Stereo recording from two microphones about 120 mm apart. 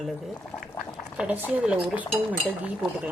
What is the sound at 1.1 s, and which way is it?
Speech, 10° right (ahead or behind).